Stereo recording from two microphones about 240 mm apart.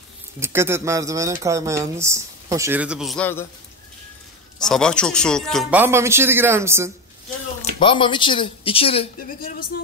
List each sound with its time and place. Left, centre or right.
0.4 s speech: centre
4.6 s speech: centre
7.8 s speech: left